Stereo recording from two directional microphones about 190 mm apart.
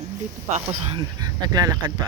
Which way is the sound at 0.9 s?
20° right (ahead or behind).